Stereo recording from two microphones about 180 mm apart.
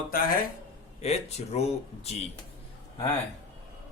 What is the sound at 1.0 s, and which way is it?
Speech, 35° left (ahead or behind).